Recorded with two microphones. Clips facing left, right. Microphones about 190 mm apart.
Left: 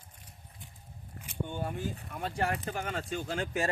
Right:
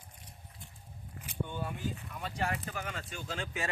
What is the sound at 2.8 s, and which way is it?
Speech, 50° left (ahead or behind).